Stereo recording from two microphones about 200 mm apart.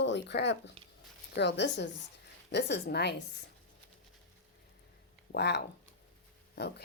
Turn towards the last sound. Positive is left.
turn(degrees=50)  # may be behind; listen again after turning